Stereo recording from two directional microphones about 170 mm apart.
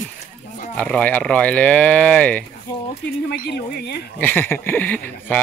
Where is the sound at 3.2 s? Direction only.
70° left (ahead or behind).